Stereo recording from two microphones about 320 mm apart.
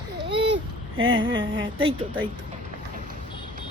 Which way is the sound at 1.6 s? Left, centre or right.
Centre.